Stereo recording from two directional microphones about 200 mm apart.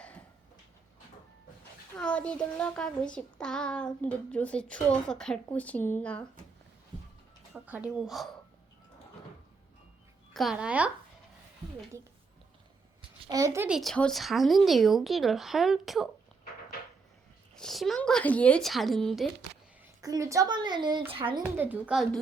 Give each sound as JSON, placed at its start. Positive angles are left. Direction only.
{"t": 2.0, "sound": "a child's voice", "side_deg": 5}
{"t": 7.5, "sound": "speech", "side_deg": -5}
{"t": 10.3, "sound": "a child's voice", "side_deg": 0}
{"t": 13.0, "sound": "a sound", "side_deg": -20}
{"t": 13.7, "sound": "a child's voice", "side_deg": 0}
{"t": 17.5, "sound": "a child's voice", "side_deg": 0}
{"t": 20.0, "sound": "speech", "side_deg": -15}
{"t": 21.4, "sound": "a child's voice", "side_deg": -10}